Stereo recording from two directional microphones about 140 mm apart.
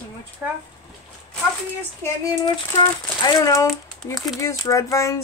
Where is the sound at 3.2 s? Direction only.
25° left (ahead or behind).